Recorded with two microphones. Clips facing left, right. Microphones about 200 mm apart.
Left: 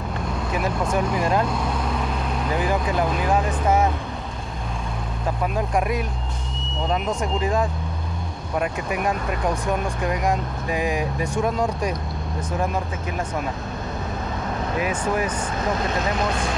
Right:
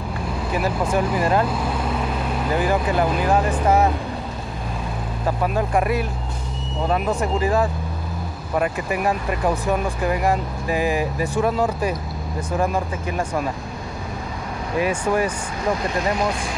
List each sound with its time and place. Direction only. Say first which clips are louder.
0.5 s speech: right 2 dB; 5° right (ahead or behind)
5.4 s speech: right 2 dB; centre (ahead or behind)
14.9 s speech: right 3 dB; 10° right (ahead or behind)